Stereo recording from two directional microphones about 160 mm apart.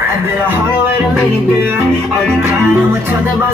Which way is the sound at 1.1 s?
10° right (ahead or behind).